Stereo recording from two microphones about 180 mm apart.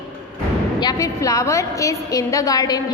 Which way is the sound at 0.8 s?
20° left (ahead or behind).